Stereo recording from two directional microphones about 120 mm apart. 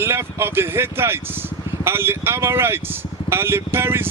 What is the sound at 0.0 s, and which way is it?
Speech, 20° right (ahead or behind).